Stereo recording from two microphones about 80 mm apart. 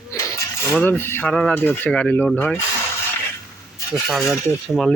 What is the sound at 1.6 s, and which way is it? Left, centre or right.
Cutlery, left.